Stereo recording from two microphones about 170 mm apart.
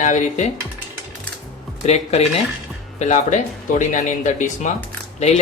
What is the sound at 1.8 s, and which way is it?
Speech, 40° left (ahead or behind).